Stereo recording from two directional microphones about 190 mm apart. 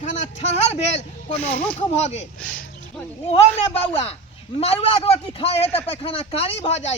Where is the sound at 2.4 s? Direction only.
5° left (ahead or behind).